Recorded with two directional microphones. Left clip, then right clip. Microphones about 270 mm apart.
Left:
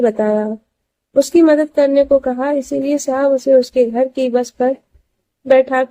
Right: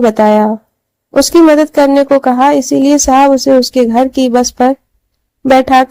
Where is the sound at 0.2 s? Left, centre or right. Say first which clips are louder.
Right 8 dB; right.